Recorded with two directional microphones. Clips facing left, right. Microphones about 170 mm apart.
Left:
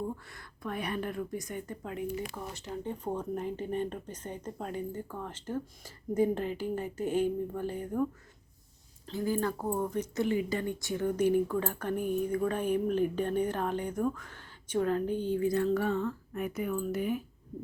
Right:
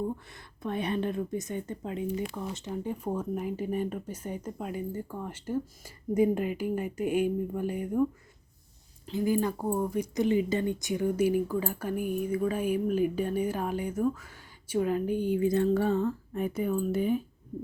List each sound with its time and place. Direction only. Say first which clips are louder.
0.3 s speech: right 4 dB; 20° right (ahead or behind)
9.0 s speech: right 4 dB; 15° right (ahead or behind)